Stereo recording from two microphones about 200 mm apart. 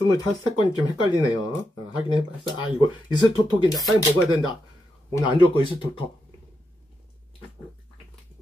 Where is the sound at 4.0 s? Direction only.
20° left (ahead or behind).